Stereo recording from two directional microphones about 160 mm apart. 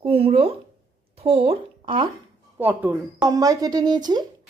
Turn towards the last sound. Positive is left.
turn(degrees=-25)  # may be behind; listen again after turning